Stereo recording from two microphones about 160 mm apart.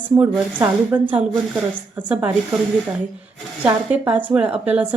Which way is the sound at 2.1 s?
10° right (ahead or behind).